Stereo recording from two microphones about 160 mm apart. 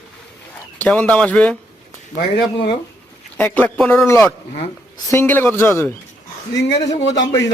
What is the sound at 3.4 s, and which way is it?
Speech, 10° left (ahead or behind).